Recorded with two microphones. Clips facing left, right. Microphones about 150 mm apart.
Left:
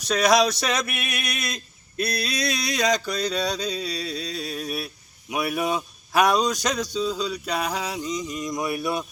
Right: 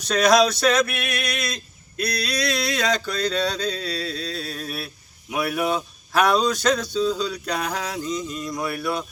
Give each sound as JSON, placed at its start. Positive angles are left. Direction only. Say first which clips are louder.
{"t": 0.1, "sound": "speech", "louder": "right 2 dB", "side_deg": 10}
{"t": 0.9, "sound": "male singing", "louder": "right 3 dB", "side_deg": 15}
{"t": 2.0, "sound": "speech", "louder": "right 1 dB", "side_deg": 25}